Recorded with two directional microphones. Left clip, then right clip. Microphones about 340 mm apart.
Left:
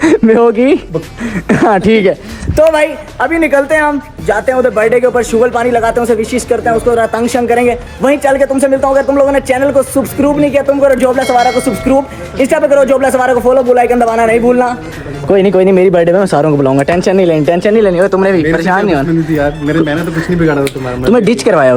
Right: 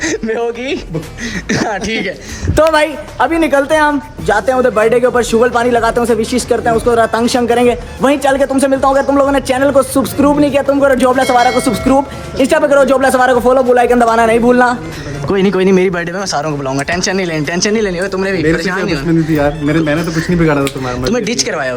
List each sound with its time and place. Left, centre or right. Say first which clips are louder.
0.3 s a woman's voice: left 9 dB; centre
2.7 s a woman's voice: left 1 dB; centre
16.4 s speech: left 8 dB; left
16.7 s a woman's voice: left 6 dB; centre